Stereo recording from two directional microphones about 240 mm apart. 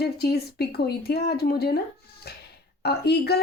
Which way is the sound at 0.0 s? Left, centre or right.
Left.